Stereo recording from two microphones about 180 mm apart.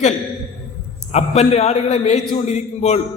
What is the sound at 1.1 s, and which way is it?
A man's voice, 35° left (ahead or behind).